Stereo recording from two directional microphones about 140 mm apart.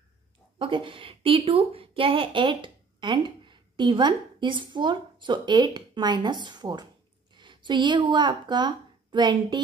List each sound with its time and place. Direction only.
0.6 s a woman's voice: 35° right (ahead or behind)